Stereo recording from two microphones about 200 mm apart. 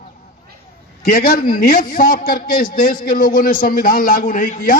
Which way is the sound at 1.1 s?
45° left (ahead or behind).